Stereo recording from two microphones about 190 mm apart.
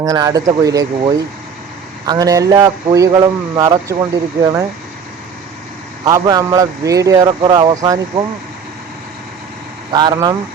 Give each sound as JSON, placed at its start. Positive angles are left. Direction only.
{"t": 0.0, "sound": "speech", "side_deg": -20}
{"t": 6.1, "sound": "speech", "side_deg": -20}
{"t": 9.9, "sound": "speech", "side_deg": -20}